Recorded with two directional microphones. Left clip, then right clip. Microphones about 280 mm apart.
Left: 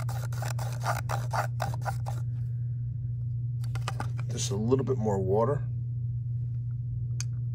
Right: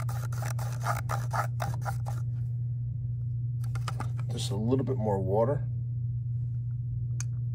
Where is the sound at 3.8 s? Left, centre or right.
Centre.